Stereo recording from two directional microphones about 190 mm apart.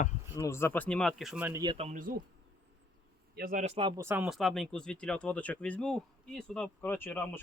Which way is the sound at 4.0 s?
10° right (ahead or behind).